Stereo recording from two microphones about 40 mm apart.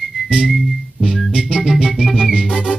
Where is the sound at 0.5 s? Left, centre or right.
Centre.